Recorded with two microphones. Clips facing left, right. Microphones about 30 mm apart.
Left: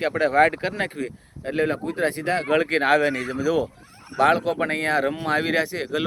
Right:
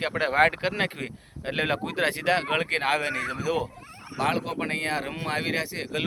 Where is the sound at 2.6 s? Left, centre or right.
Centre.